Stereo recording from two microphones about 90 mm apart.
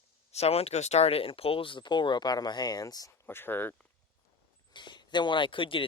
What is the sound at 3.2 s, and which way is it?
Speech, 25° left (ahead or behind).